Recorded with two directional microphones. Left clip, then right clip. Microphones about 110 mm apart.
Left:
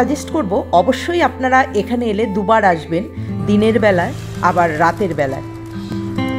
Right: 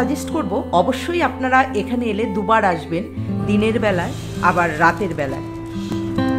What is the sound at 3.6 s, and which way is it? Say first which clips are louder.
Speech: left 6 dB; 30° left (ahead or behind).